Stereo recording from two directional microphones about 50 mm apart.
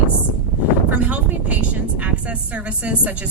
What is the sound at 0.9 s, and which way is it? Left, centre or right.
Speech, right.